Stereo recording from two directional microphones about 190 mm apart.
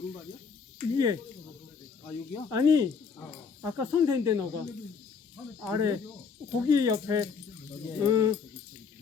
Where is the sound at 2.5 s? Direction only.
20° right (ahead or behind).